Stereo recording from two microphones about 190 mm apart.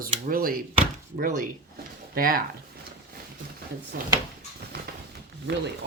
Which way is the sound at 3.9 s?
50° right (ahead or behind).